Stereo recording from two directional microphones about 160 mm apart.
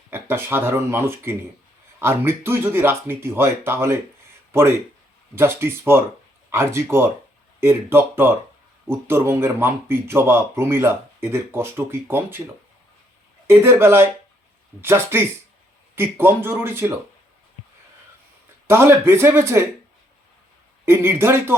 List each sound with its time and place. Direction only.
0.1 s speech: 15° right (ahead or behind)
5.3 s speech: 15° right (ahead or behind)
13.5 s speech: 15° right (ahead or behind)
18.7 s speech: 15° right (ahead or behind)
20.8 s speech: 15° right (ahead or behind)